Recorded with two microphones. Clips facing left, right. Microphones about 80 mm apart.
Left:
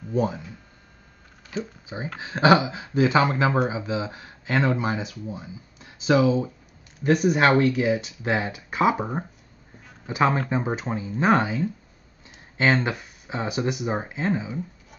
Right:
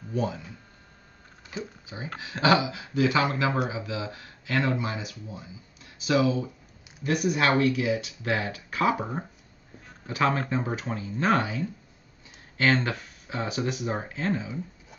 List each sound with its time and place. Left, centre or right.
0.1 s speech: left
1.6 s speech: left
8.2 s speech: left